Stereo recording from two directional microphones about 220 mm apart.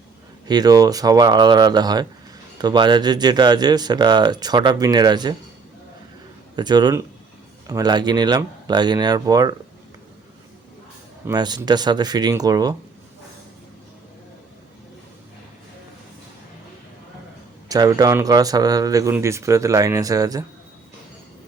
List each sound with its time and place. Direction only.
0.4 s speech: 20° right (ahead or behind)
6.6 s speech: 20° right (ahead or behind)
11.3 s speech: 20° right (ahead or behind)
17.7 s speech: 15° right (ahead or behind)